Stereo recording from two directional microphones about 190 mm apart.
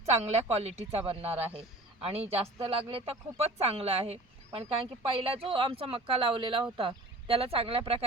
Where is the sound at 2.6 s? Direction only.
30° right (ahead or behind).